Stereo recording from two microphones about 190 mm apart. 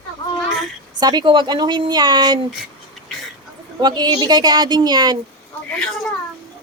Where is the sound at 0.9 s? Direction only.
20° right (ahead or behind).